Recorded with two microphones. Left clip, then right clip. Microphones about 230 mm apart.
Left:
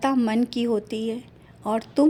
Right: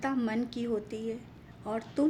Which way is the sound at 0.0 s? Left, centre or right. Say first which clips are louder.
Left 9 dB; left.